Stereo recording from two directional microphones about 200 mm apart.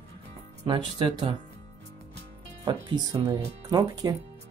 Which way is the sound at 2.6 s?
20° right (ahead or behind).